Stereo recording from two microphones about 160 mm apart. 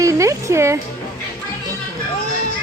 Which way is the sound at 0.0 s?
20° right (ahead or behind).